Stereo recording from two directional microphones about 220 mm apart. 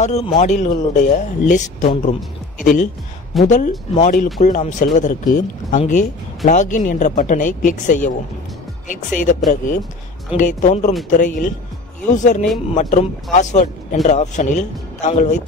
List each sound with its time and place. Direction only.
0.0 s speech: 30° left (ahead or behind)